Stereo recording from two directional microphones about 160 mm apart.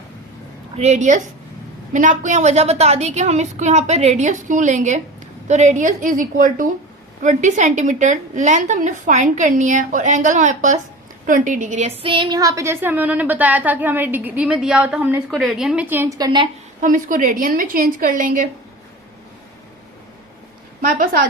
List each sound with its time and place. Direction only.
0.8 s a woman's voice: 45° right (ahead or behind)
12.0 s a woman's voice: 30° right (ahead or behind)
16.8 s a woman's voice: 55° right (ahead or behind)
20.8 s a woman's voice: 65° right (ahead or behind)